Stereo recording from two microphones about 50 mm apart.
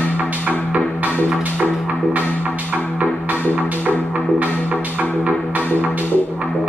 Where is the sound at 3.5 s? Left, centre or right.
Right.